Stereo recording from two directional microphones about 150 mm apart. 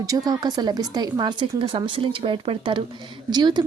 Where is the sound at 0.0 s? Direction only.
25° right (ahead or behind).